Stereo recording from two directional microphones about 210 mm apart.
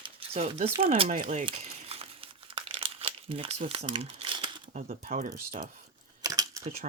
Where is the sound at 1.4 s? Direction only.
30° right (ahead or behind).